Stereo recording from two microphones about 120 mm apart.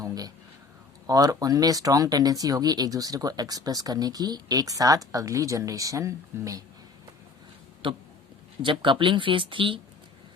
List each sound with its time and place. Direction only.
0.0 s a sound: 30° right (ahead or behind)
1.0 s speech: 30° right (ahead or behind)
7.8 s speech: 45° right (ahead or behind)